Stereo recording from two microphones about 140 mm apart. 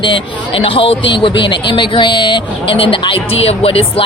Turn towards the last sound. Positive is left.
turn(degrees=45)  # may be behind; listen again after turning